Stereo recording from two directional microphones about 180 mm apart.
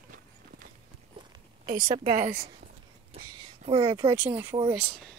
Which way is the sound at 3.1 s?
35° right (ahead or behind).